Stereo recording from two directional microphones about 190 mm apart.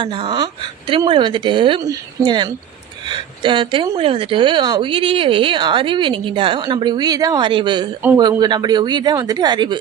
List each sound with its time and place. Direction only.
0.0 s a woman's voice: 25° right (ahead or behind)